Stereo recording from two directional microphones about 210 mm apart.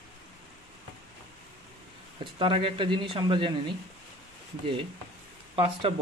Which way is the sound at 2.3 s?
25° right (ahead or behind).